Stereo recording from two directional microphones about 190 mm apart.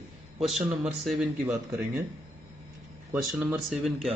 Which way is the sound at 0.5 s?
Centre (ahead or behind).